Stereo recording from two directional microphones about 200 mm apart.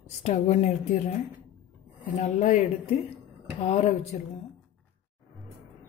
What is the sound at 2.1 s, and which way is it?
Speech, 40° left (ahead or behind).